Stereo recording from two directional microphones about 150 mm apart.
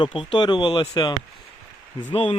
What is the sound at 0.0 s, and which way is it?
Speech, 35° left (ahead or behind).